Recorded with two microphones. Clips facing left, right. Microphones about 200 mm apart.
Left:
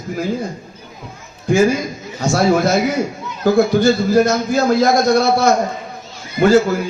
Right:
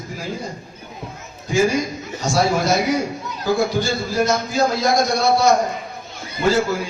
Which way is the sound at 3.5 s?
55° left (ahead or behind).